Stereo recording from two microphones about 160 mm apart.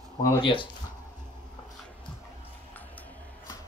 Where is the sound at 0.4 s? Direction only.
30° left (ahead or behind).